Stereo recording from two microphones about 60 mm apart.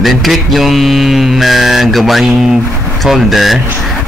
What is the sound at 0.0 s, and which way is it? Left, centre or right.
Mantra, centre.